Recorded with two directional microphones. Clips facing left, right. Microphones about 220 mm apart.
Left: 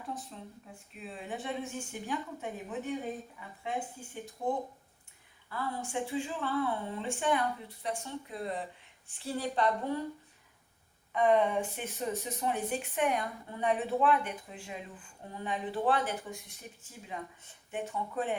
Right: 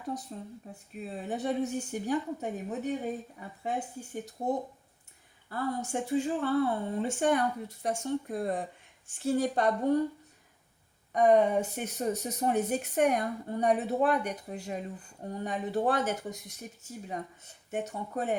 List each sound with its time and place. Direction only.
0.1 s speech: 40° right (ahead or behind)
11.1 s speech: 45° right (ahead or behind)